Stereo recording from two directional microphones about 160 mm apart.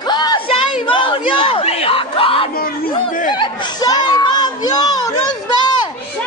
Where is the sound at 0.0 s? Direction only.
25° left (ahead or behind).